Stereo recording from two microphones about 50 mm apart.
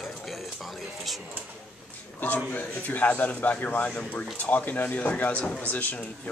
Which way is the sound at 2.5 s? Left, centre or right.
Left.